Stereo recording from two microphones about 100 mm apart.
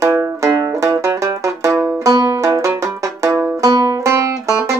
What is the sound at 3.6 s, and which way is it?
Banjo, 35° right (ahead or behind).